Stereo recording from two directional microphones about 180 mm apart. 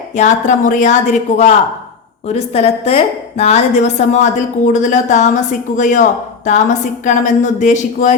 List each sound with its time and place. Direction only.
0.2 s a woman's voice: 45° left (ahead or behind)